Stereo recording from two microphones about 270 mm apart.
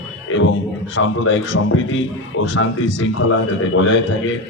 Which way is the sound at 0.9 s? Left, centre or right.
Left.